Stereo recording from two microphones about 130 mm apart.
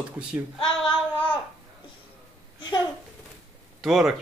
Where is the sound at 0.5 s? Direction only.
45° left (ahead or behind).